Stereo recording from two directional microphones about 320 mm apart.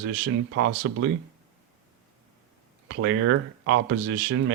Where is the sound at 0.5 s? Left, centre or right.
Right.